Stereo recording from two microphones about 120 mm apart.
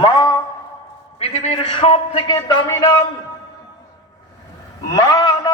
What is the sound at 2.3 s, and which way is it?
Speech, 40° left (ahead or behind).